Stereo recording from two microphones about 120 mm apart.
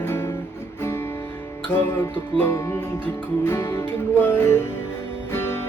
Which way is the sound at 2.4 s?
25° left (ahead or behind).